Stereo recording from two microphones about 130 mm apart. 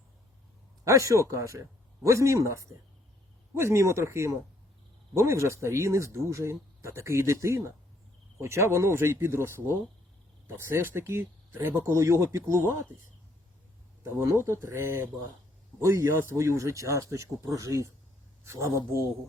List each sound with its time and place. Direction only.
0.9 s speech: 25° right (ahead or behind)
14.0 s speech: 20° right (ahead or behind)